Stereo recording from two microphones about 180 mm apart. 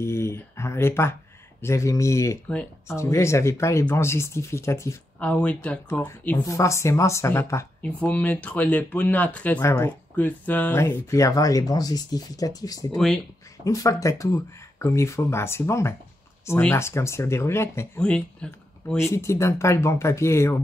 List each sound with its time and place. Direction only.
0.0 s speech: 15° left (ahead or behind)
12.9 s speech: 5° left (ahead or behind)
13.7 s speech: 20° left (ahead or behind)